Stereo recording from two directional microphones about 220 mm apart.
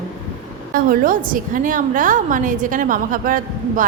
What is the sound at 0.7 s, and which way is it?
A woman's voice, 40° right (ahead or behind).